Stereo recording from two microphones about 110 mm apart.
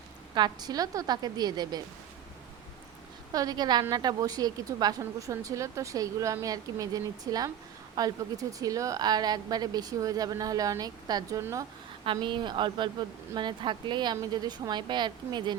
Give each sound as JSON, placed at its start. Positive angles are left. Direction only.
{"t": 0.3, "sound": "a woman's voice", "side_deg": -40}
{"t": 3.3, "sound": "a woman's voice", "side_deg": -35}
{"t": 12.1, "sound": "a woman's voice", "side_deg": -45}